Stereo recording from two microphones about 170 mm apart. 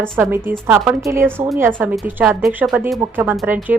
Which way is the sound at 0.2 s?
15° right (ahead or behind).